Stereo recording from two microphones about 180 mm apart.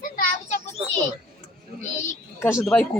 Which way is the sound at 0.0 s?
45° left (ahead or behind).